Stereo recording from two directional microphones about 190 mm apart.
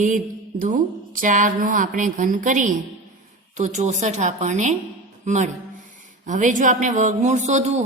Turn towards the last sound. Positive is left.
turn(degrees=-35)  # may be behind; listen again after turning